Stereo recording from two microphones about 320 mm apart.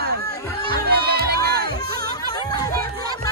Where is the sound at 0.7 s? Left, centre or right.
Right.